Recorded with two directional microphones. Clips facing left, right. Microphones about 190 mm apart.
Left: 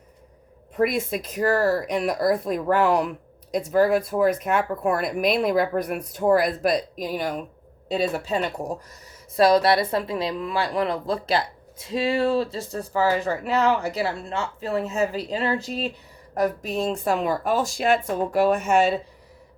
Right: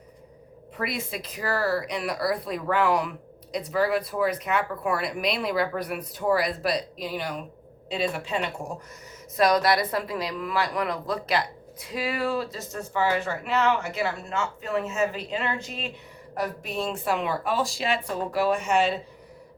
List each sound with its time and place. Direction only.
0.8 s speech: 50° left (ahead or behind)
9.3 s speech: 30° left (ahead or behind); by 18.9 s 45° left (ahead or behind)